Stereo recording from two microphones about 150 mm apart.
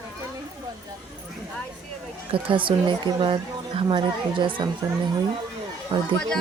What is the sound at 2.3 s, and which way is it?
A woman's voice, 35° right (ahead or behind).